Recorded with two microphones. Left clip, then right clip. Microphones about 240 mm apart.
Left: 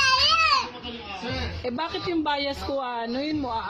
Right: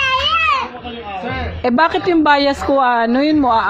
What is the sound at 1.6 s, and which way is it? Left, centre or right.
A woman's voice, right.